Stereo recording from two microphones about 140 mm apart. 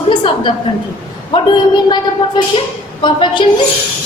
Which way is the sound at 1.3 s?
30° left (ahead or behind).